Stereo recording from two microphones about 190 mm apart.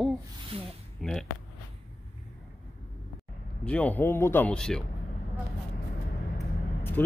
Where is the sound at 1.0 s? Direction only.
Centre (ahead or behind).